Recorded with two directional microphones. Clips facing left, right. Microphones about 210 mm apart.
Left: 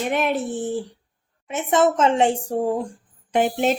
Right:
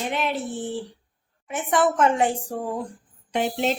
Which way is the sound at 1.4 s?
25° left (ahead or behind).